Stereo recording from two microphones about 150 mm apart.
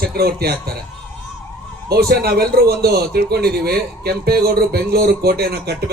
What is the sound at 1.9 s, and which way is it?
A man's voice, 90° right.